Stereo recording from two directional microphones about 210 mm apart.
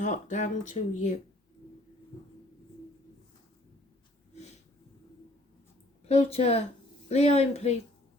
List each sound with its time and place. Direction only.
0.0 s speech: 35° left (ahead or behind)
6.1 s a woman's voice: 30° left (ahead or behind)